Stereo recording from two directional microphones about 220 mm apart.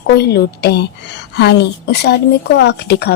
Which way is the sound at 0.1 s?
50° left (ahead or behind).